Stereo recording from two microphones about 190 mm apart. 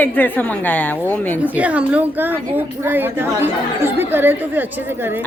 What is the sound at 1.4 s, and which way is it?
A woman's voice, 5° right (ahead or behind).